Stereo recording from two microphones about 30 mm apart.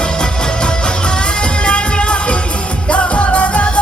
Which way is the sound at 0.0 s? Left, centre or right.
Left.